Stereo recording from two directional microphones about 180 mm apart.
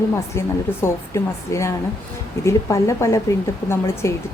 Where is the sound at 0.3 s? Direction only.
15° left (ahead or behind).